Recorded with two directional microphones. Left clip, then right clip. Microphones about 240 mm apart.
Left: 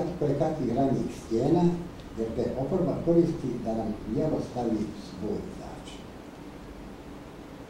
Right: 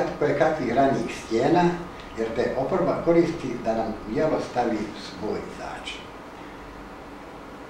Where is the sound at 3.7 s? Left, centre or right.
Centre.